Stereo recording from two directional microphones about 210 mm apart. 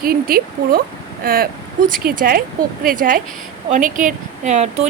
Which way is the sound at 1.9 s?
45° right (ahead or behind).